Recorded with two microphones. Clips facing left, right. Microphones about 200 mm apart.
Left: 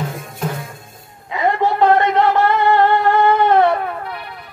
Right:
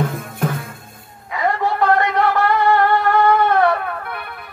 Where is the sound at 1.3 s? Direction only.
20° left (ahead or behind).